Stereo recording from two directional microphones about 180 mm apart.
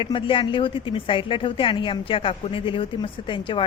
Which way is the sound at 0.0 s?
30° left (ahead or behind).